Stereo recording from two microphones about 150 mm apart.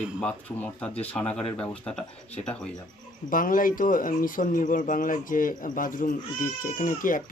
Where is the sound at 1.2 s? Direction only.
45° left (ahead or behind).